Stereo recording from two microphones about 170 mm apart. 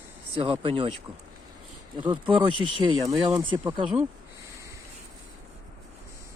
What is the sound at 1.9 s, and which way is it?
Speech, 30° right (ahead or behind).